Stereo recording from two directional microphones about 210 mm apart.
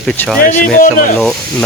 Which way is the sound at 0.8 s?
40° left (ahead or behind).